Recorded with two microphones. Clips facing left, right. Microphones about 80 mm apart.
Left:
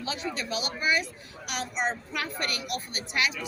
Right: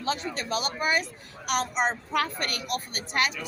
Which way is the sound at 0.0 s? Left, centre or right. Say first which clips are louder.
Right 3 dB; right.